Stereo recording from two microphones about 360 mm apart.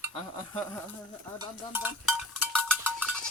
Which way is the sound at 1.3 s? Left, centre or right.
Centre.